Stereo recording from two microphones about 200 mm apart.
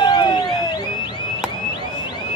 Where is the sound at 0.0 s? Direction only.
20° left (ahead or behind).